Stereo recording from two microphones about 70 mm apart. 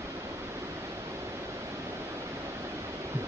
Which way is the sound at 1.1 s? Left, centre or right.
Right.